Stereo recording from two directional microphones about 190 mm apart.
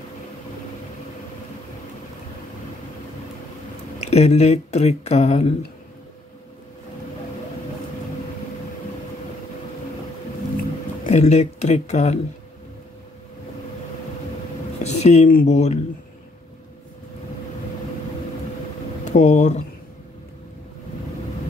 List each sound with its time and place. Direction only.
4.0 s speech: 35° left (ahead or behind)
11.1 s speech: 35° left (ahead or behind)
14.8 s a sound: 35° left (ahead or behind)
15.3 s speech: 35° left (ahead or behind)
19.0 s speech: 40° left (ahead or behind)